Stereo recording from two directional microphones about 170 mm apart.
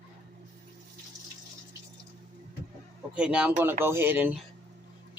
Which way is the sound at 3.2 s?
5° right (ahead or behind).